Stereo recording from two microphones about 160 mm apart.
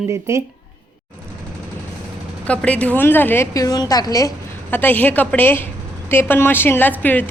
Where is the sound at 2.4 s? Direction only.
10° left (ahead or behind).